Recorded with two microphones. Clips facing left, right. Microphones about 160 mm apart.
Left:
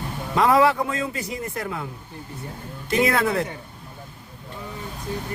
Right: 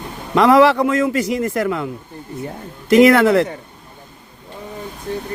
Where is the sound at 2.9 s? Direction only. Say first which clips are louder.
Right 11 dB; 80° right.